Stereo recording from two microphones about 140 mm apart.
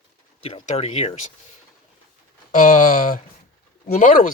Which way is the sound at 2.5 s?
65° left (ahead or behind).